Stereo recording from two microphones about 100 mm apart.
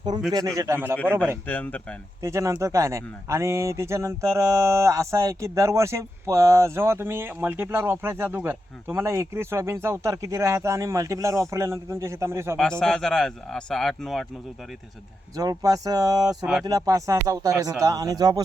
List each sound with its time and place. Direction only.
0.3 s speech: 35° right (ahead or behind)
1.0 s speech: 15° left (ahead or behind)
2.2 s speech: 30° right (ahead or behind)
12.8 s speech: 5° left (ahead or behind)
15.4 s speech: 35° right (ahead or behind)